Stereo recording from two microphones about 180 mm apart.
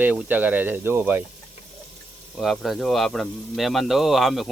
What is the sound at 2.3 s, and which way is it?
Speech, centre (ahead or behind).